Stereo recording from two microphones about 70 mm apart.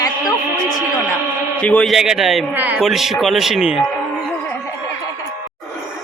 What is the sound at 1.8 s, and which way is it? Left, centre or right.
Speech, centre.